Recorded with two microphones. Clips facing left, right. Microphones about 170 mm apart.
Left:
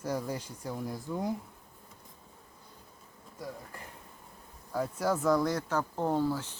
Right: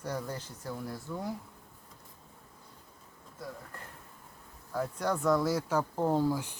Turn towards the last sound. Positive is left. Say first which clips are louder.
# right 1 dB
turn(degrees=-15)  # may be behind; listen again after turning